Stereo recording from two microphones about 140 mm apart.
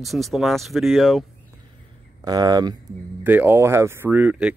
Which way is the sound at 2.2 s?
30° right (ahead or behind).